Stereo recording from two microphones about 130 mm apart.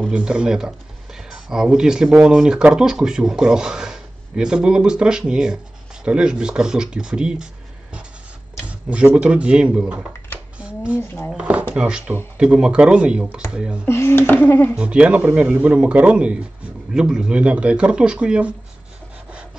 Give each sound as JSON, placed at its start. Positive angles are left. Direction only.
{"t": 0.1, "sound": "speech", "side_deg": -5}
{"t": 8.6, "sound": "speech", "side_deg": -10}
{"t": 10.6, "sound": "a sound", "side_deg": -10}
{"t": 11.0, "sound": "speech", "side_deg": 15}
{"t": 11.3, "sound": "speech", "side_deg": -10}
{"t": 13.8, "sound": "speech", "side_deg": 20}
{"t": 14.8, "sound": "speech", "side_deg": -10}